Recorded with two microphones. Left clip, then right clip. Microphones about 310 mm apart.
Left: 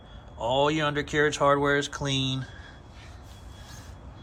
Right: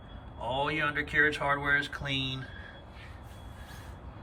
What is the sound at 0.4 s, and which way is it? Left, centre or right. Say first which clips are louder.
Speech: left 6 dB; centre.